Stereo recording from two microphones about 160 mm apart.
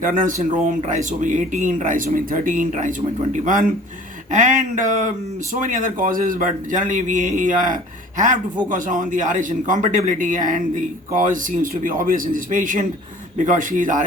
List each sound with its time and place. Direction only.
0.0 s speech: 55° right (ahead or behind)